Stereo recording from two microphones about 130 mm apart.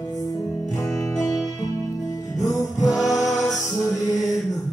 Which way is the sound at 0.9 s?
Centre (ahead or behind).